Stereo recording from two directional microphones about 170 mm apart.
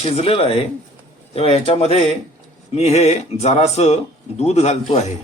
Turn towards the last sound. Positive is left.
turn(degrees=40)  # may be behind; listen again after turning